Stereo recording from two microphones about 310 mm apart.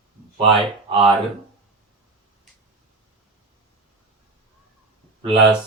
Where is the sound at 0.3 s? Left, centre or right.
Centre.